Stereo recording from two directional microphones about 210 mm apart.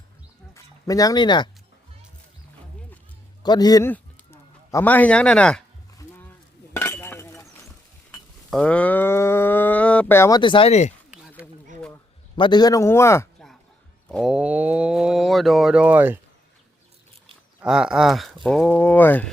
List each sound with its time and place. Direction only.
0.5 s speech: 15° left (ahead or behind)
3.4 s a man's voice: 20° left (ahead or behind)
6.0 s cattle: 10° left (ahead or behind)
6.7 s glass: 10° left (ahead or behind)
8.1 s livestock: 5° left (ahead or behind); by 10.9 s 30° left (ahead or behind)
11.4 s a sound: 5° left (ahead or behind)
12.4 s speech: 20° left (ahead or behind)
14.1 s speech: centre (ahead or behind)
17.7 s speech: 5° right (ahead or behind)